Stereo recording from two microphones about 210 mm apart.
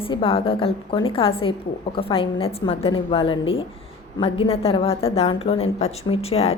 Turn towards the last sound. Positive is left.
turn(degrees=30)  # may be behind; listen again after turning